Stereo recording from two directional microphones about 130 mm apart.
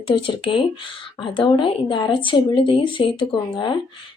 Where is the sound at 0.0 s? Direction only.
40° left (ahead or behind).